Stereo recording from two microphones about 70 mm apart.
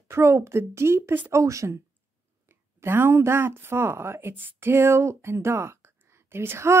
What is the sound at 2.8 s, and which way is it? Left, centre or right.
A woman's voice, right.